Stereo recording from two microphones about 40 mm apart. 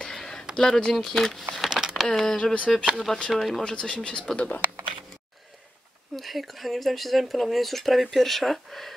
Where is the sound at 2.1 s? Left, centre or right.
Centre.